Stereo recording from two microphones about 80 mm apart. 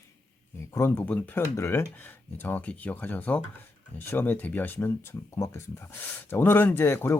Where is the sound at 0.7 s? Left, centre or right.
Left.